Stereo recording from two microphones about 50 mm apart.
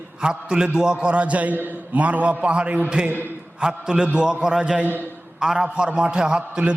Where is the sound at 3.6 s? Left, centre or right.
Centre.